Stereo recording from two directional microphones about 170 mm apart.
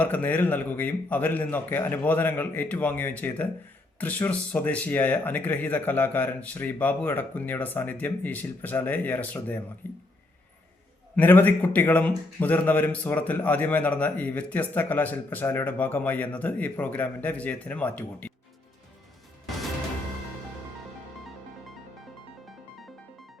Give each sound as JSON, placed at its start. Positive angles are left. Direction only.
{"t": 0.0, "sound": "a man's voice", "side_deg": 10}
{"t": 11.2, "sound": "a man's voice", "side_deg": 10}